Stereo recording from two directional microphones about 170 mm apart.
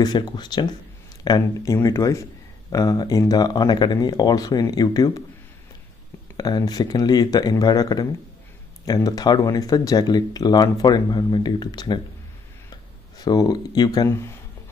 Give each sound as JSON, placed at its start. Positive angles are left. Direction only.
{"t": 0.0, "sound": "speech", "side_deg": 25}
{"t": 6.3, "sound": "speech", "side_deg": 20}
{"t": 13.2, "sound": "speech", "side_deg": 25}